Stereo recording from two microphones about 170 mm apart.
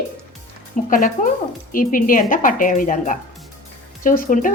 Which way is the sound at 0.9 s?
50° left (ahead or behind).